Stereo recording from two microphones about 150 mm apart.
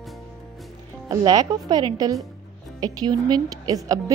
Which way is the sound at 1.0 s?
25° right (ahead or behind).